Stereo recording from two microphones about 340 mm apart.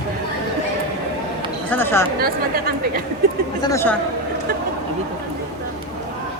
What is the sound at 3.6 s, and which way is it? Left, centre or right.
Speech, centre.